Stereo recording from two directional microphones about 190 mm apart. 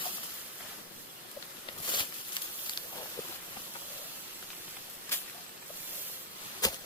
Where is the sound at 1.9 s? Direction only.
25° left (ahead or behind).